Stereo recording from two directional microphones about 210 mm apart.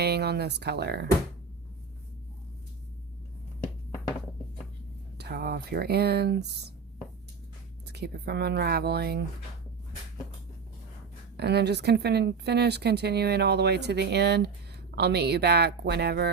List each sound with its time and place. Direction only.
0.0 s speech: 50° right (ahead or behind)
5.1 s speech: 50° right (ahead or behind)
7.9 s speech: 55° right (ahead or behind)
11.3 s speech: 50° right (ahead or behind)